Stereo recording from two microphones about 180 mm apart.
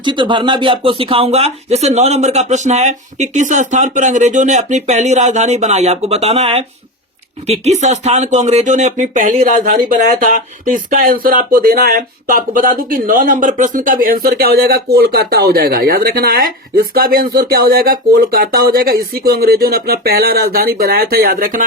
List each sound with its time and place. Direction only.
0.0 s speech: 25° right (ahead or behind); by 21.6 s 50° right (ahead or behind)